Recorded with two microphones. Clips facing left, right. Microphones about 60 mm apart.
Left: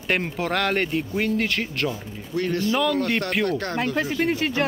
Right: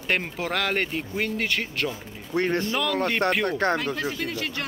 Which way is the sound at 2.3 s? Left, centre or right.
Right.